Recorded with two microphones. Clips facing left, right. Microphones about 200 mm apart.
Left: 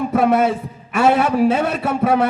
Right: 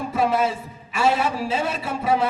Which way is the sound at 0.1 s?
60° left (ahead or behind).